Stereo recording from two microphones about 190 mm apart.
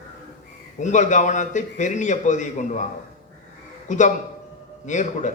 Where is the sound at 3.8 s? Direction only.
40° left (ahead or behind).